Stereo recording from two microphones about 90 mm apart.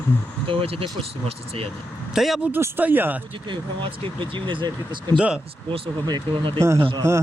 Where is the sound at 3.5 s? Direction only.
65° right (ahead or behind).